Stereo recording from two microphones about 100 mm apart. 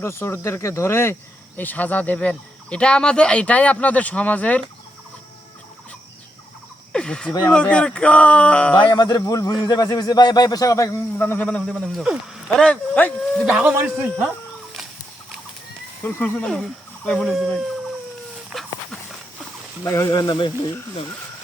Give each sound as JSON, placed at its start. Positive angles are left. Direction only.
{"t": 0.0, "sound": "speech", "side_deg": 25}
{"t": 6.9, "sound": "speech", "side_deg": 10}
{"t": 8.8, "sound": "a man's voice", "side_deg": 50}
{"t": 11.2, "sound": "speech", "side_deg": 20}
{"t": 11.6, "sound": "speech", "side_deg": -5}
{"t": 12.5, "sound": "speech", "side_deg": 10}
{"t": 13.4, "sound": "speech", "side_deg": -10}
{"t": 16.0, "sound": "speech", "side_deg": 20}
{"t": 17.3, "sound": "speech", "side_deg": 0}
{"t": 18.5, "sound": "a sound", "side_deg": 0}
{"t": 19.8, "sound": "a man's voice", "side_deg": 35}